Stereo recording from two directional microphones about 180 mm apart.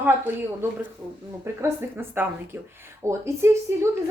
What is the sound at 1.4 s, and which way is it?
A woman's voice, 15° right (ahead or behind).